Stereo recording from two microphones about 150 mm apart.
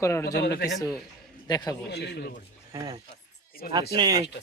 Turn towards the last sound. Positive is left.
turn(degrees=-25)  # may be behind; listen again after turning